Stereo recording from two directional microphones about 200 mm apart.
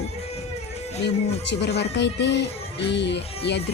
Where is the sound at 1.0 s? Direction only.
60° left (ahead or behind).